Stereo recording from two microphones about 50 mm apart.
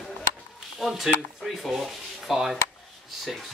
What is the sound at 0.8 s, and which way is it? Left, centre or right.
Speech, centre.